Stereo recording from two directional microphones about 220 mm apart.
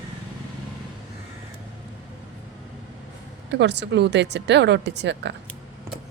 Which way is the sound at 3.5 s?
50° right (ahead or behind).